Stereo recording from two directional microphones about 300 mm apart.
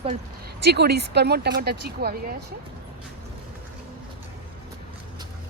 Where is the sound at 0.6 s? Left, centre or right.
Right.